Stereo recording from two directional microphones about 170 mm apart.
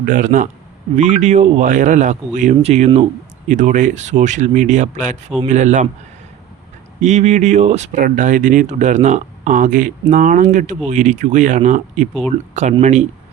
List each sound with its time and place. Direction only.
0.0 s speech: 50° right (ahead or behind)
3.5 s speech: 45° right (ahead or behind)
7.0 s speech: 45° right (ahead or behind)